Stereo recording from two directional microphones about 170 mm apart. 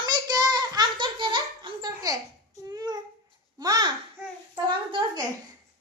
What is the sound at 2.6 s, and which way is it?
Child singing, 20° right (ahead or behind).